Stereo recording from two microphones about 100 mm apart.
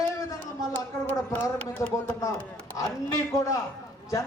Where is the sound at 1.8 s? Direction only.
30° left (ahead or behind).